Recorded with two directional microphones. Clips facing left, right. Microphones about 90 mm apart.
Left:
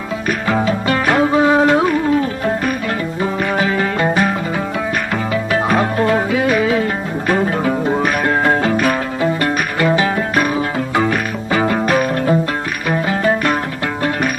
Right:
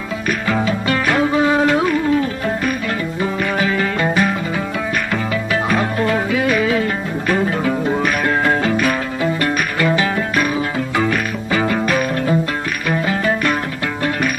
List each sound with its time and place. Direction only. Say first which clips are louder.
0.5 s music: left 2 dB; 35° left (ahead or behind)
5.3 s music: left 4 dB; 40° left (ahead or behind)
9.4 s music: left 1 dB; 30° left (ahead or behind)